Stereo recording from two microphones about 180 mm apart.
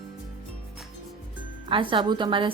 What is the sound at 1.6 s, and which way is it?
Speech, 30° right (ahead or behind).